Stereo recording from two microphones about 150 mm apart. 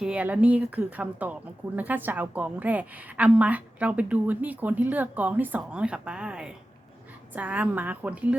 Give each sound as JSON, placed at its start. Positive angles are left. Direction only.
{"t": 0.0, "sound": "speech", "side_deg": -10}